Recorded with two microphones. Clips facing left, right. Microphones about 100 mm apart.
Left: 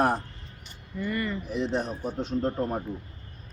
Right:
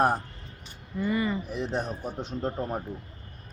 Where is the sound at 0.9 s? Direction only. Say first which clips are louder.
Right 3 dB; 15° right (ahead or behind).